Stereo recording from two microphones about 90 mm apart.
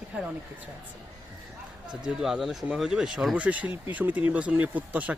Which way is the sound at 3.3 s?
15° right (ahead or behind).